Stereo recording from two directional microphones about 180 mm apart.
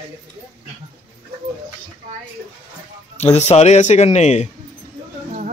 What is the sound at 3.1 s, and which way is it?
A man's voice, 35° left (ahead or behind).